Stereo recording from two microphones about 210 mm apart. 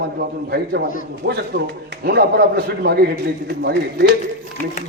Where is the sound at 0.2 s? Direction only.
45° right (ahead or behind).